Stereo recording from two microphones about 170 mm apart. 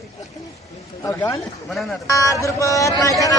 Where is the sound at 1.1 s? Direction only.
10° left (ahead or behind).